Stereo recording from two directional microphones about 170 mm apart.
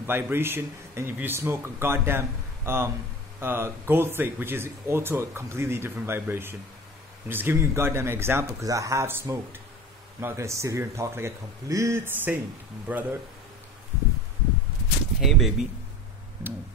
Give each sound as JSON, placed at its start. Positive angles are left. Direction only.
{"t": 0.0, "sound": "speech", "side_deg": -15}
{"t": 15.1, "sound": "speech", "side_deg": 0}